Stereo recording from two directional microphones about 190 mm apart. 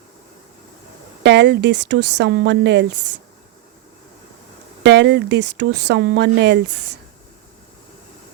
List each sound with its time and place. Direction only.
1.2 s speech: 65° right (ahead or behind)
4.8 s speech: 70° right (ahead or behind)